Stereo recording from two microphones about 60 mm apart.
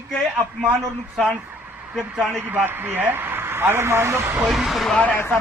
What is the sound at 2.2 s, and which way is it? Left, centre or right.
Speech, right.